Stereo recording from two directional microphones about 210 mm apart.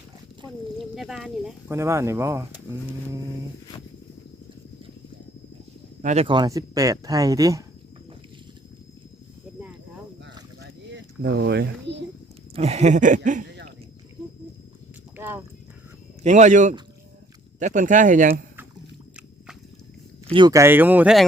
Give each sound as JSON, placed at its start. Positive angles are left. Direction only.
{"t": 0.8, "sound": "speech", "side_deg": 0}
{"t": 1.7, "sound": "speech", "side_deg": -15}
{"t": 6.0, "sound": "speech", "side_deg": -35}
{"t": 6.2, "sound": "speech", "side_deg": -20}
{"t": 10.6, "sound": "a sound", "side_deg": -55}
{"t": 12.5, "sound": "a sound", "side_deg": -30}
{"t": 15.1, "sound": "horse", "side_deg": -10}
{"t": 16.2, "sound": "a sound", "side_deg": -35}
{"t": 20.3, "sound": "speech", "side_deg": -20}